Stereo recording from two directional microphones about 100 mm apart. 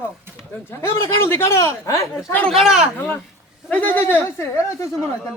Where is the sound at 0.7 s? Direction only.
25° left (ahead or behind).